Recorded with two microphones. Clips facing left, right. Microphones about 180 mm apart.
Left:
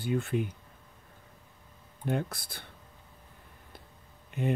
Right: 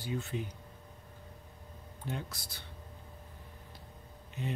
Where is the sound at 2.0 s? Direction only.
55° left (ahead or behind).